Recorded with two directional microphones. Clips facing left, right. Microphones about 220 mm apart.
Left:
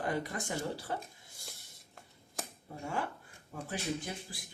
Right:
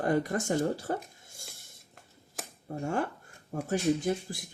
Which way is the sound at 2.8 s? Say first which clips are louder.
Right 6 dB; 50° right (ahead or behind).